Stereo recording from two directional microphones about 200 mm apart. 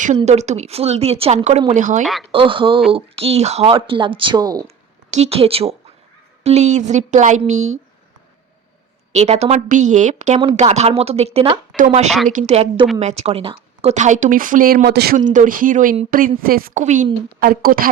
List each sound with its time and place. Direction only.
0.2 s a woman's voice: 35° right (ahead or behind)
2.3 s speech: 25° right (ahead or behind)
5.1 s a woman's voice: 30° right (ahead or behind)
9.1 s a woman's voice: 35° right (ahead or behind); by 15.2 s 55° right (ahead or behind)
15.3 s speech: 40° right (ahead or behind)